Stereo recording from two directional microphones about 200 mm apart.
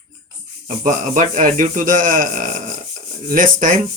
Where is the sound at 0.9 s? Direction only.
40° right (ahead or behind).